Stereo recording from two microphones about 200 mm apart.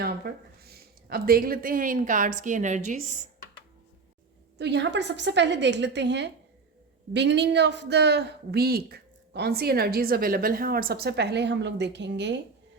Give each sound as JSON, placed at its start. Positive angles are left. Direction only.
{"t": 0.3, "sound": "a woman's voice", "side_deg": -45}
{"t": 4.5, "sound": "a woman's voice", "side_deg": -60}